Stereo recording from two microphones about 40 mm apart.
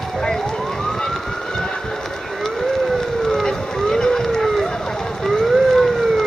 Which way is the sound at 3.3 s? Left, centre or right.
Centre.